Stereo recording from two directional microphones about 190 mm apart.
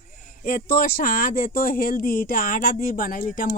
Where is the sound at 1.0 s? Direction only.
45° left (ahead or behind).